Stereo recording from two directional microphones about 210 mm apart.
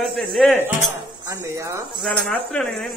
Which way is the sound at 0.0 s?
Centre (ahead or behind).